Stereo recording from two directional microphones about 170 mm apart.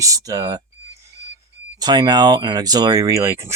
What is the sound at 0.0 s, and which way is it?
Speech, 20° right (ahead or behind).